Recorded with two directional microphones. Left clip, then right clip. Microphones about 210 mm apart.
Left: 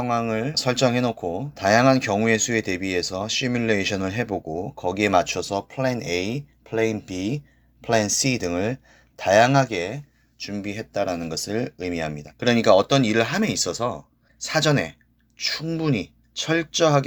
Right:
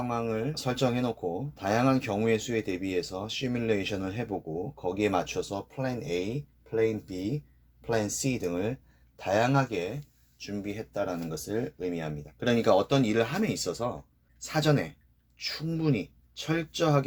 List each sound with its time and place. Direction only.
0.0 s speech: 20° left (ahead or behind)